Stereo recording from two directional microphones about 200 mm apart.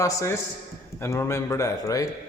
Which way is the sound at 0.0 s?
15° left (ahead or behind).